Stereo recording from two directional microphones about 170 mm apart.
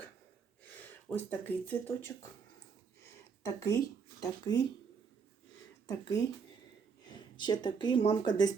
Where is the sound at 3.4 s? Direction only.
20° left (ahead or behind).